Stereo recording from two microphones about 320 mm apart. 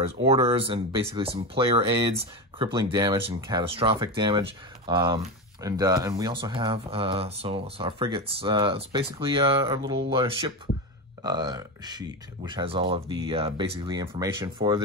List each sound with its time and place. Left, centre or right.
0.3 s speech: centre